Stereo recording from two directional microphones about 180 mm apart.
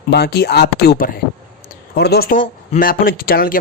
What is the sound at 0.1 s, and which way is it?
Speech, 65° left (ahead or behind).